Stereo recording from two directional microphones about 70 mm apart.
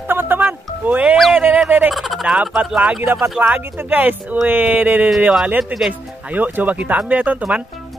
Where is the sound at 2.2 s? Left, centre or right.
Centre.